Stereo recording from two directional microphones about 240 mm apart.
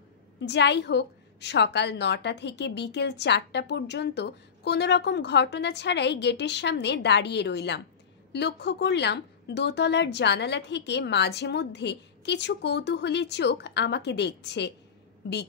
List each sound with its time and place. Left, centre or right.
0.4 s a woman's voice: left